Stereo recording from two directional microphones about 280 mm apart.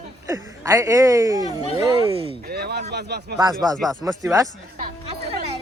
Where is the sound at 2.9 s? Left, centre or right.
Right.